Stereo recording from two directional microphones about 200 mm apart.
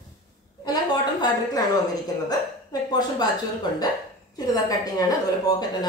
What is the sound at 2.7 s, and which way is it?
Speech, 20° left (ahead or behind).